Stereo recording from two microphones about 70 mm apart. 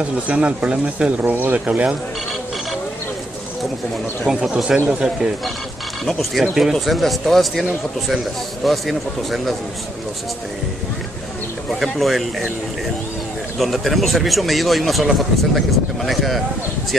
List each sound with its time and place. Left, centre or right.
0.3 s speech: centre
4.3 s speech: centre
6.0 s speech: centre
8.6 s speech: centre
11.8 s speech: centre
13.6 s speech: centre